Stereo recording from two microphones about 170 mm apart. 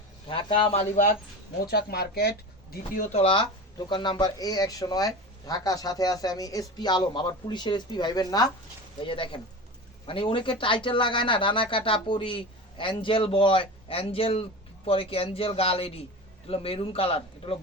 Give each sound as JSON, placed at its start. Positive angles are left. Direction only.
{"t": 0.3, "sound": "a man's voice", "side_deg": 30}
{"t": 1.6, "sound": "speech", "side_deg": 65}
{"t": 2.9, "sound": "a man's voice", "side_deg": 45}